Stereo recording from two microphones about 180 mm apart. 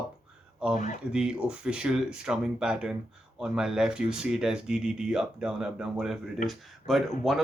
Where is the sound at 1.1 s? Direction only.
5° right (ahead or behind).